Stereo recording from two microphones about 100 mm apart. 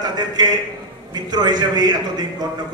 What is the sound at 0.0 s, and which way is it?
A man's voice, 45° right (ahead or behind).